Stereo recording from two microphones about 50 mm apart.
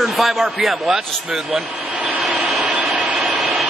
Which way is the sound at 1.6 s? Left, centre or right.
Right.